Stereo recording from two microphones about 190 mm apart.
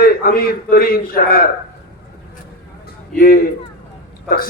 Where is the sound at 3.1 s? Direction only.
45° left (ahead or behind).